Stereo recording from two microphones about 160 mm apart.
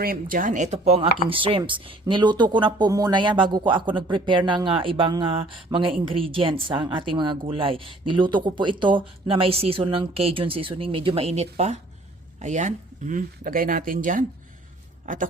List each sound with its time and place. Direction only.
0.0 s speech: 60° right (ahead or behind)